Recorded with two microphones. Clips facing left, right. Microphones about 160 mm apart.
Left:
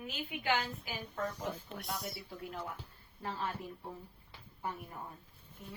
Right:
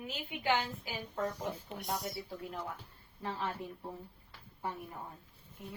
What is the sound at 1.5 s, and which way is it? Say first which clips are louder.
Speech: right 1 dB; 15° right (ahead or behind).